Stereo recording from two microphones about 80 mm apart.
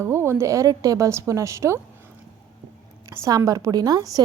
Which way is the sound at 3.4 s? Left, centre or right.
Right.